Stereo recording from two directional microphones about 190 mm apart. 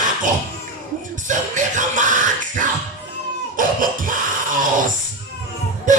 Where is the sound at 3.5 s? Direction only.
45° right (ahead or behind).